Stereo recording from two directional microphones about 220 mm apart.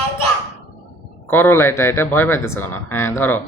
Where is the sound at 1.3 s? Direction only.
10° left (ahead or behind).